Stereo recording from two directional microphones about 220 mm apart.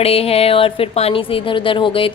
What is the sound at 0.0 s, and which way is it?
A woman's voice, 25° left (ahead or behind).